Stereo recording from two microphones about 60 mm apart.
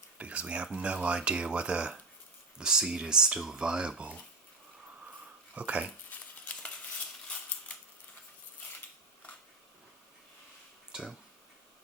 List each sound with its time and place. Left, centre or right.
0.2 s speech: right
5.5 s speech: right
6.1 s crumpling: left
7.3 s a sound: centre
10.9 s speech: centre